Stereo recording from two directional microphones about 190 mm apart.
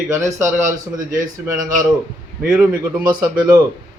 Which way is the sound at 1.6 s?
45° right (ahead or behind).